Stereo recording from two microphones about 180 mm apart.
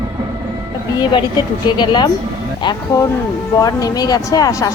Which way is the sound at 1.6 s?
25° left (ahead or behind).